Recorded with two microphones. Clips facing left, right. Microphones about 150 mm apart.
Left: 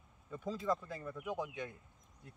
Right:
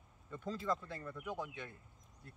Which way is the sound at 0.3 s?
10° left (ahead or behind).